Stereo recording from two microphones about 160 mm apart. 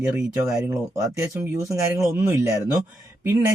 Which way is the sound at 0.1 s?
20° right (ahead or behind).